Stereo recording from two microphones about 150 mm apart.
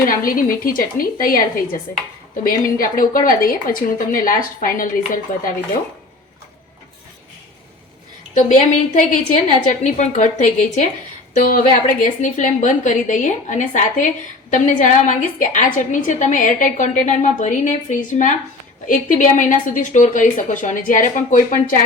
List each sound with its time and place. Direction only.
0.1 s speech: 70° left (ahead or behind)
8.4 s a woman's voice: 55° left (ahead or behind)